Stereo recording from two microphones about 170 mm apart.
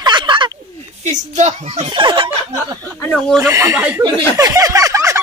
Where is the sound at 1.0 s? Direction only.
45° right (ahead or behind).